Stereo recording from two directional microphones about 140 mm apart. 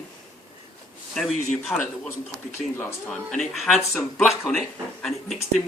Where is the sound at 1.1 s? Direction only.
5° left (ahead or behind).